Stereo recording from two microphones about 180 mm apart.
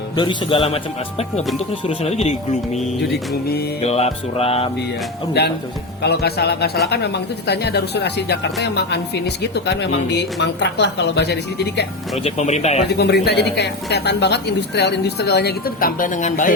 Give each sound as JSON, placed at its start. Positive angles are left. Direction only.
{"t": 0.2, "sound": "speech", "side_deg": 30}
{"t": 1.9, "sound": "music", "side_deg": 35}
{"t": 3.8, "sound": "music", "side_deg": 35}
{"t": 5.4, "sound": "speech", "side_deg": 65}
{"t": 12.1, "sound": "music", "side_deg": 35}
{"t": 12.9, "sound": "speech", "side_deg": 65}